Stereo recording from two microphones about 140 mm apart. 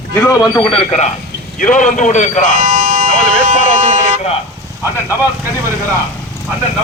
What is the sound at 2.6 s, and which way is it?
Buzzer, 90° right.